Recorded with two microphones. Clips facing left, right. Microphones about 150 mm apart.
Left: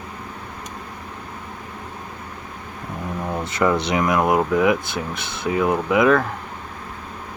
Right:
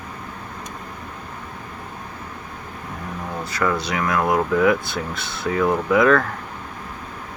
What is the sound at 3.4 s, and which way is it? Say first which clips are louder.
Speech: left 3 dB; 20° left (ahead or behind).